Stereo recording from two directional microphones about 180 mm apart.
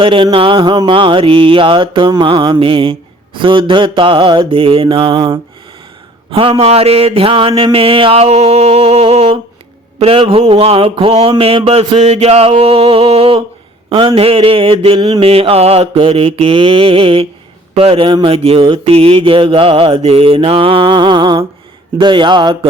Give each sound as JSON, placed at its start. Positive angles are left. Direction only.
{"t": 0.0, "sound": "mantra", "side_deg": -30}
{"t": 6.3, "sound": "mantra", "side_deg": -30}
{"t": 15.3, "sound": "mantra", "side_deg": -35}